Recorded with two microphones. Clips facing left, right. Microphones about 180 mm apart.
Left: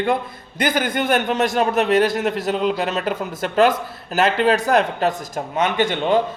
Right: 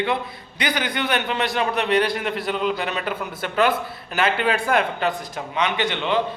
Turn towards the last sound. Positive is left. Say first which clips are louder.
# left 4 dB
turn(degrees=45)  # may be behind; listen again after turning